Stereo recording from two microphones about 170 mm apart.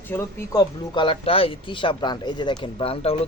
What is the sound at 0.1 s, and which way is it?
Speech, 15° left (ahead or behind).